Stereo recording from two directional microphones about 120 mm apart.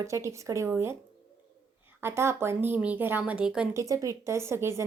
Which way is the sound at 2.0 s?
20° right (ahead or behind).